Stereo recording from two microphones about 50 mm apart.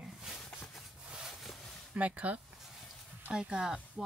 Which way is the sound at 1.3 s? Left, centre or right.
Centre.